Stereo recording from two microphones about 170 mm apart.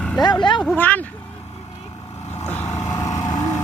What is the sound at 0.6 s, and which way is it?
Speech, 5° left (ahead or behind).